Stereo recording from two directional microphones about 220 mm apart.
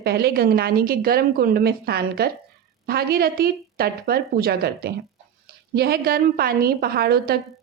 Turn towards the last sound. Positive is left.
turn(degrees=-45)  # may be behind; listen again after turning